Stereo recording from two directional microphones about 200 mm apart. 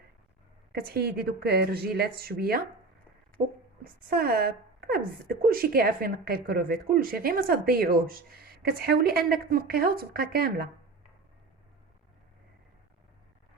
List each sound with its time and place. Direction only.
0.7 s a woman's voice: 50° right (ahead or behind)
3.8 s a woman's voice: 50° right (ahead or behind)